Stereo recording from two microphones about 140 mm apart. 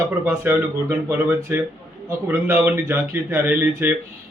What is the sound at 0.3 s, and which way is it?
A man's voice, 15° right (ahead or behind).